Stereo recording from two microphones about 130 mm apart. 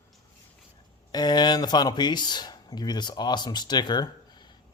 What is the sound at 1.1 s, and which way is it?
Speech, 30° left (ahead or behind).